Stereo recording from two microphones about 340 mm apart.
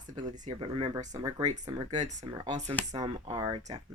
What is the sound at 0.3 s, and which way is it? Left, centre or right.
Speech, centre.